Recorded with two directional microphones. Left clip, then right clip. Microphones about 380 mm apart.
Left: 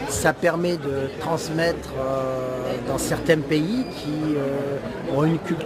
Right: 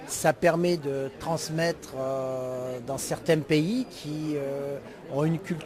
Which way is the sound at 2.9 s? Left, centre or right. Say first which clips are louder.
Left 5 dB; right.